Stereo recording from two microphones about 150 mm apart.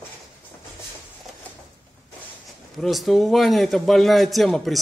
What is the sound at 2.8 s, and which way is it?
A man's voice, centre (ahead or behind).